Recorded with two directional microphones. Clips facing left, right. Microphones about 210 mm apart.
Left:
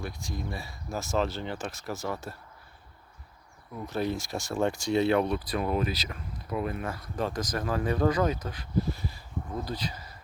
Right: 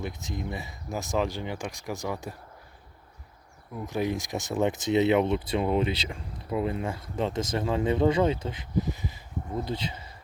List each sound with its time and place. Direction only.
0.0 s speech: 20° right (ahead or behind)
3.8 s speech: 15° right (ahead or behind)